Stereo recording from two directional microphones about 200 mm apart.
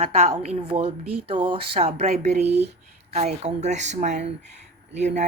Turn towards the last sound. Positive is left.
turn(degrees=-35)  # may be behind; listen again after turning